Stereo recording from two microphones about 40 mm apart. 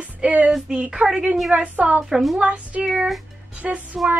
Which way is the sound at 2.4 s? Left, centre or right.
Right.